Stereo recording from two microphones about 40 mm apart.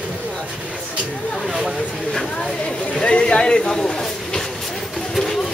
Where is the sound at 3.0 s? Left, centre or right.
Left.